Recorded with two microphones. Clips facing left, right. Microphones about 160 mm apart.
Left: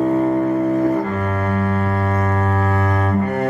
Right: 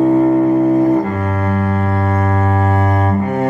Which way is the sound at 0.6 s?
30° right (ahead or behind).